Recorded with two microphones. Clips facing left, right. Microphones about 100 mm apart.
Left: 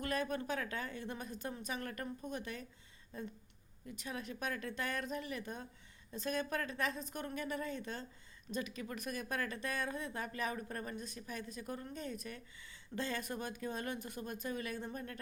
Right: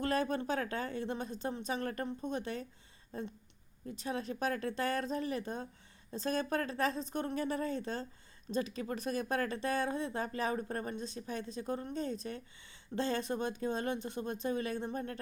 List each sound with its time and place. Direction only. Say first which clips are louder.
0.0 s a woman's voice: right 5 dB; 30° right (ahead or behind)